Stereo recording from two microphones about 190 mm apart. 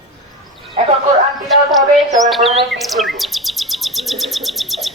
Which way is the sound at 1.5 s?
Centre (ahead or behind).